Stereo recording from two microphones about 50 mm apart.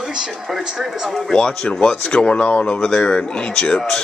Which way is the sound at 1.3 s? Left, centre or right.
Centre.